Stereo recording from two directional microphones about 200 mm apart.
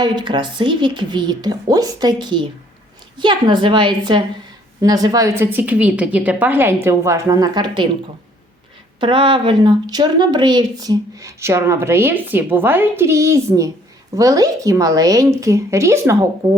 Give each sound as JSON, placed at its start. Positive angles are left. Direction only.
{"t": 0.0, "sound": "a woman's voice", "side_deg": -25}
{"t": 9.0, "sound": "speech", "side_deg": -25}